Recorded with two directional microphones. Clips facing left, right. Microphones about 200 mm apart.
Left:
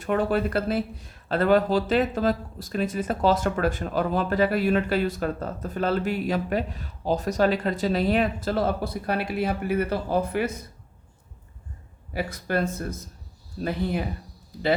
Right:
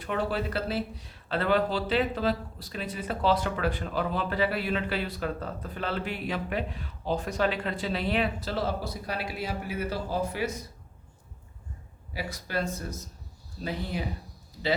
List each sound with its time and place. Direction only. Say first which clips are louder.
0.0 s speech: left 6 dB; 50° left (ahead or behind)
12.1 s speech: left 6 dB; 55° left (ahead or behind)